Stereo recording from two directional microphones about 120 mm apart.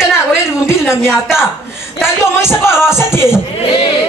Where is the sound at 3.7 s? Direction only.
45° left (ahead or behind).